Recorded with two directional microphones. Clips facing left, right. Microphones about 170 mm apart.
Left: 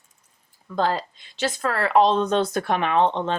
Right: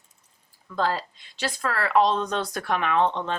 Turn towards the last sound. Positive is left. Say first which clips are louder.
# left 3 dB
turn(degrees=25)  # may be behind; listen again after turning